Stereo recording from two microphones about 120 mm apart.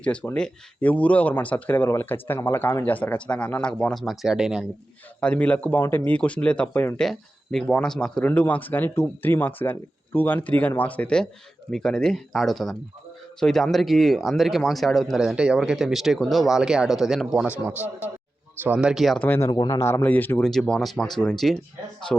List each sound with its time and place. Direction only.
0.0 s speech: 10° left (ahead or behind)
5.2 s speech: 10° left (ahead or behind)
17.6 s a man's voice: 15° right (ahead or behind)
19.2 s speech: 20° left (ahead or behind)
19.5 s speech: 35° left (ahead or behind)
19.8 s speech: 20° left (ahead or behind)
20.4 s speech: 5° left (ahead or behind)